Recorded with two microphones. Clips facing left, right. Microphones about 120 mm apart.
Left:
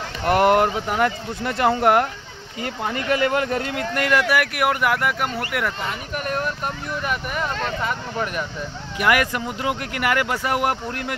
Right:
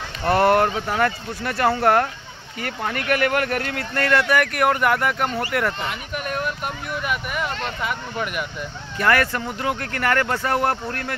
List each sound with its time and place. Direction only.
0.2 s speech: 20° left (ahead or behind); by 5.9 s centre (ahead or behind)
6.2 s vehicle: 5° right (ahead or behind)
8.9 s speech: 15° left (ahead or behind)